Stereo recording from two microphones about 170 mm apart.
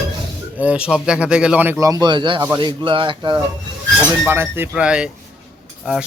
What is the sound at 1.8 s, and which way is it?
Speech, 20° right (ahead or behind).